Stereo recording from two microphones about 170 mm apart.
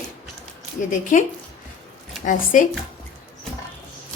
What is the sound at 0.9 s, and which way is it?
Speech, 50° left (ahead or behind).